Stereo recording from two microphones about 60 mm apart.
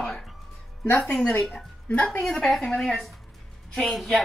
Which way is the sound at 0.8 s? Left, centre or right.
Left.